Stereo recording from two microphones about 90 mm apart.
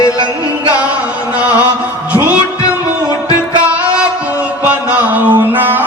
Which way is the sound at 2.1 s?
15° right (ahead or behind).